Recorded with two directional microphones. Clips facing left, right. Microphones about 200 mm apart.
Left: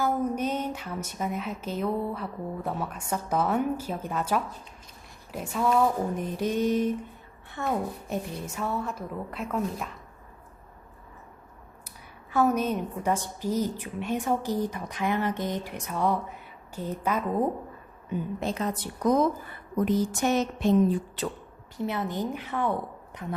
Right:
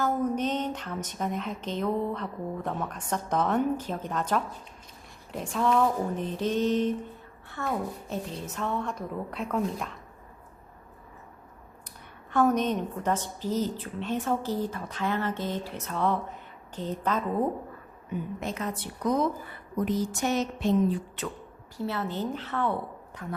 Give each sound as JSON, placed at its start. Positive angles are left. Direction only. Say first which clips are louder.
{"t": 0.0, "sound": "a woman's voice", "louder": "even", "side_deg": 10}
{"t": 11.9, "sound": "a woman's voice", "louder": "left 1 dB", "side_deg": 5}
{"t": 18.3, "sound": "a woman's voice", "louder": "left 3 dB", "side_deg": 30}
{"t": 20.3, "sound": "speech", "louder": "left 2 dB", "side_deg": 50}
{"t": 21.8, "sound": "a woman's voice", "louder": "left 1 dB", "side_deg": 15}